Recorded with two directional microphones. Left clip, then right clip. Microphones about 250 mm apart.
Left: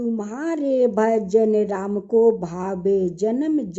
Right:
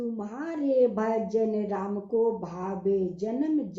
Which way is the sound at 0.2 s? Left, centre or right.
Left.